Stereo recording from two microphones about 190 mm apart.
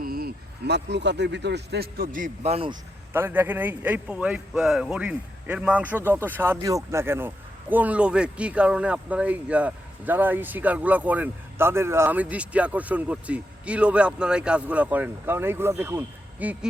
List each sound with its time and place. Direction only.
0.0 s speech: 50° right (ahead or behind); by 2.7 s 30° right (ahead or behind)
3.1 s a man's voice: 10° right (ahead or behind)